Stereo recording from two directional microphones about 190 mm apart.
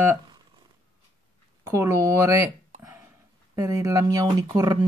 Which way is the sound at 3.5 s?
15° right (ahead or behind).